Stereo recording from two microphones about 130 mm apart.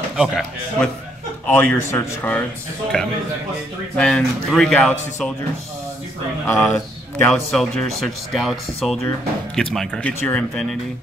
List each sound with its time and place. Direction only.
0.1 s speech: 5° right (ahead or behind)
1.5 s a man's voice: 15° left (ahead or behind)
6.4 s speech: 20° left (ahead or behind)
7.3 s speech: centre (ahead or behind)